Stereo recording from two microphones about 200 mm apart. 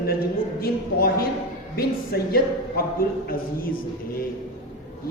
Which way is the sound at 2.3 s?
50° left (ahead or behind).